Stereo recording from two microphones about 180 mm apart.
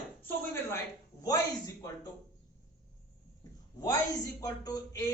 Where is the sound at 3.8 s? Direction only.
20° left (ahead or behind).